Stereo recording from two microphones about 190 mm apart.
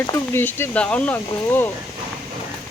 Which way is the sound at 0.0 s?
15° left (ahead or behind).